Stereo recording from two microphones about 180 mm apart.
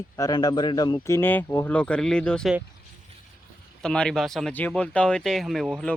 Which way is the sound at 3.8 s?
5° left (ahead or behind).